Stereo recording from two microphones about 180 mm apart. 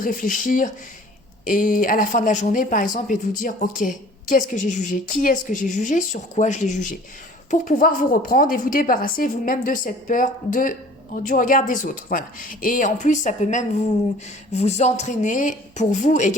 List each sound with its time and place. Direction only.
0.0 s speech: 50° left (ahead or behind)